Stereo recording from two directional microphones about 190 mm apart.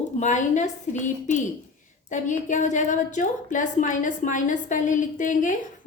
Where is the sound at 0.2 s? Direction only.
40° left (ahead or behind).